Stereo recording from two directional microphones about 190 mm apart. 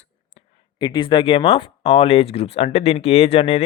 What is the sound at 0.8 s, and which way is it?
Speech, 25° left (ahead or behind).